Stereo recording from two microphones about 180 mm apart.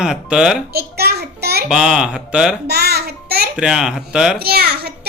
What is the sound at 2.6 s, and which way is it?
Child singing, 65° right (ahead or behind).